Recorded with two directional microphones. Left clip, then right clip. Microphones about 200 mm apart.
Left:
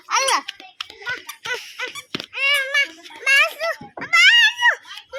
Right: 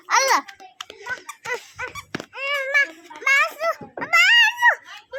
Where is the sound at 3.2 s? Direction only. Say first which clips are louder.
Left 2 dB; 50° right (ahead or behind).